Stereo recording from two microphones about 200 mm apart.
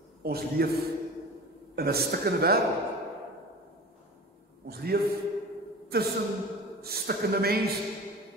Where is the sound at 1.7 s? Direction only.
50° right (ahead or behind).